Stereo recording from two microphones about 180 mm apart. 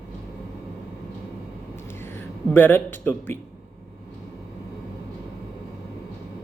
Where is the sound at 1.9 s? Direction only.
15° left (ahead or behind).